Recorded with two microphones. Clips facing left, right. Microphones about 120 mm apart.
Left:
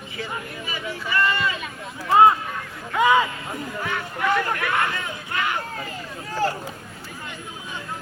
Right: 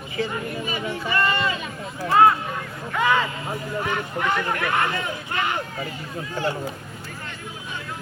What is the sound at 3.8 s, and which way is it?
Speech, 40° right (ahead or behind).